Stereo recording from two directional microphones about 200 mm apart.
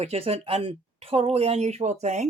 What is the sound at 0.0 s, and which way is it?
Speech, 30° right (ahead or behind).